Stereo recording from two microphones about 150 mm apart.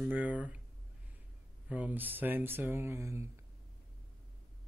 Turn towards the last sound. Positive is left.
turn(degrees=-15)  # may be behind; listen again after turning